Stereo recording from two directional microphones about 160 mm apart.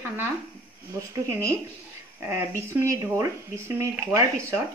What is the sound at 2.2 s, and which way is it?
Speech, 15° right (ahead or behind).